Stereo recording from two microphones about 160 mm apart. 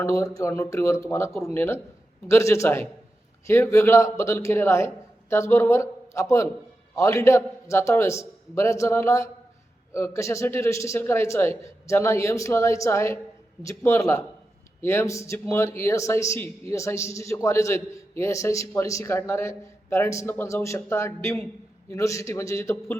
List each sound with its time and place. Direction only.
0.0 s speech: 20° left (ahead or behind)